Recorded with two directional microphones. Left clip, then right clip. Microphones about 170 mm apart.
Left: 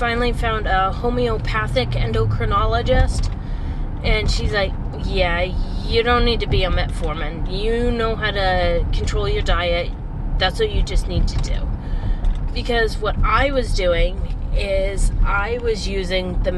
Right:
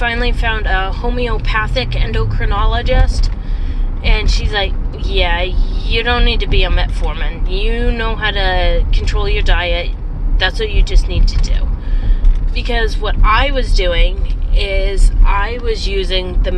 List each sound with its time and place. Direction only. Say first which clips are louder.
0.0 s speech: right 3 dB; 15° left (ahead or behind)
4.0 s speech: right 2 dB; 15° left (ahead or behind)
12.5 s speech: right 1 dB; 15° left (ahead or behind)